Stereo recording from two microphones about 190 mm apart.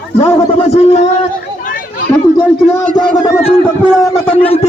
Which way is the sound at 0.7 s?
35° left (ahead or behind).